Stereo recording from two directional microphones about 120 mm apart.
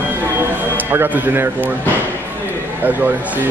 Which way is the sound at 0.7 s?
15° right (ahead or behind).